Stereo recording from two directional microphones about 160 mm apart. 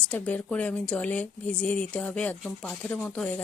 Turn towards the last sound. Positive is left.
turn(degrees=5)  # may be behind; listen again after turning